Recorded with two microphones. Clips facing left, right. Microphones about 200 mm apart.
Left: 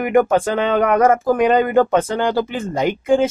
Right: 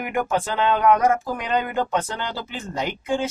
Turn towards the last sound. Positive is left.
turn(degrees=50)  # may be behind; listen again after turning